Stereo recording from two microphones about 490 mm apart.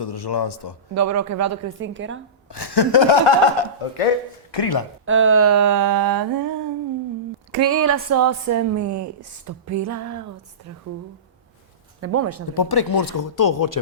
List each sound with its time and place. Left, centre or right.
0.0 s a man's voice: left
0.9 s a woman's voice: right
2.5 s speech: left
4.5 s a man's voice: left
5.0 s a woman's voice: right
7.6 s a woman's voice: right
11.9 s speech: right
12.5 s speech: left